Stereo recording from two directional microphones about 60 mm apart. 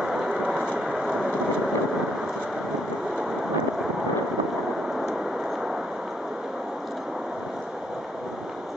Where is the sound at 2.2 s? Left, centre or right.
Centre.